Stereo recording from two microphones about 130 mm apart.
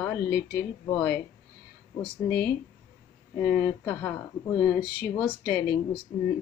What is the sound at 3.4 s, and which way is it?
Speech, 15° left (ahead or behind).